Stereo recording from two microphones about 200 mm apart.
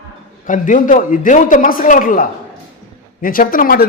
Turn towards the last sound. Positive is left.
turn(degrees=45)  # may be behind; listen again after turning